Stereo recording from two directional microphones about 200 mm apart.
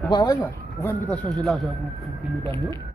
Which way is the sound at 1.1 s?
Centre (ahead or behind).